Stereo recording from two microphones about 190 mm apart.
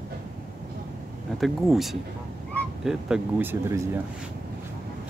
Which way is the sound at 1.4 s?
Centre (ahead or behind).